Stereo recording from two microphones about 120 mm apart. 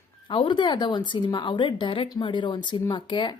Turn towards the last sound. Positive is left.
turn(degrees=40)  # may be behind; listen again after turning